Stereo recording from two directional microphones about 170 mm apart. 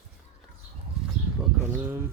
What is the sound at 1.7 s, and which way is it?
Speech, 15° right (ahead or behind).